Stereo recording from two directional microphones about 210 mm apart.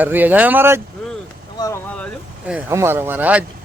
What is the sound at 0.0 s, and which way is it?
Speech, 10° right (ahead or behind).